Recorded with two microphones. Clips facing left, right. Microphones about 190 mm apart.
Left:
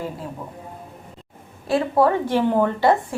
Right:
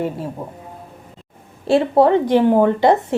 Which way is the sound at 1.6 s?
25° right (ahead or behind).